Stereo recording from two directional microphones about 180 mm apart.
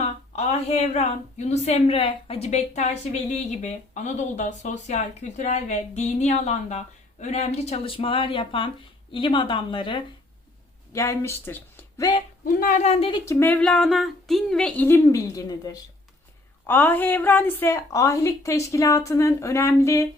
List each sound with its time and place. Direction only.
0.0 s a woman's voice: 35° left (ahead or behind)
10.9 s speech: 15° left (ahead or behind)
12.5 s a woman's voice: 45° left (ahead or behind); by 13.2 s 30° left (ahead or behind)
13.2 s a woman's voice: 10° left (ahead or behind)